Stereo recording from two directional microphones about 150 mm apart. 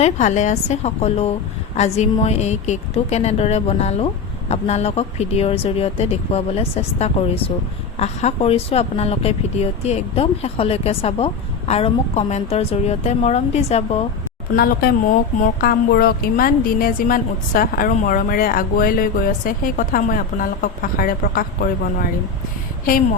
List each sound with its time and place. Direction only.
0.0 s a woman's voice: 50° left (ahead or behind)
14.5 s a woman's voice: 90° left; by 21.7 s 70° left (ahead or behind)